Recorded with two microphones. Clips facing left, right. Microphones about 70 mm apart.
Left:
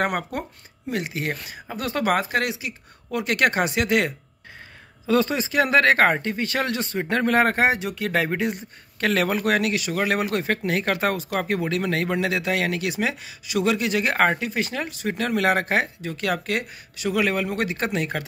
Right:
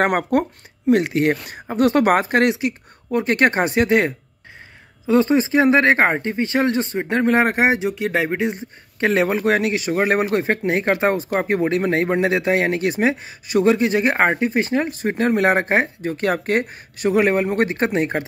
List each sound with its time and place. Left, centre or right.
0.0 s speech: right
3.1 s speech: right